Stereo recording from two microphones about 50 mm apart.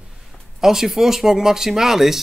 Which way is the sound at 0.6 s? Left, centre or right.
Centre.